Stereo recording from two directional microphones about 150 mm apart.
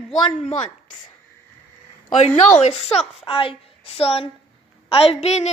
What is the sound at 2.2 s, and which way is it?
A child's voice, 50° left (ahead or behind).